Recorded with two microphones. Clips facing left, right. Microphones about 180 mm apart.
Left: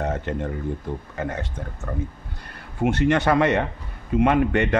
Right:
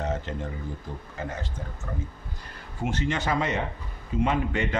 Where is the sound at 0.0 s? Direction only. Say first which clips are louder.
Left 5 dB; 60° left (ahead or behind).